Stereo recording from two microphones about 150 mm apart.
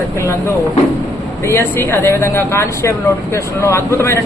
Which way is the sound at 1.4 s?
15° left (ahead or behind).